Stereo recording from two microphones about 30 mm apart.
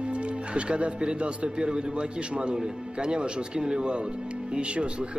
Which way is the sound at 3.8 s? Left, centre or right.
Right.